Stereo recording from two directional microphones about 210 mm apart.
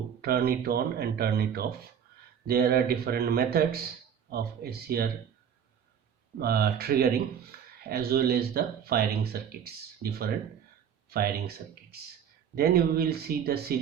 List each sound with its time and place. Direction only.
0.2 s speech: 50° right (ahead or behind)
6.4 s speech: 45° right (ahead or behind)
7.5 s a sound: 50° right (ahead or behind)
7.9 s speech: 45° right (ahead or behind)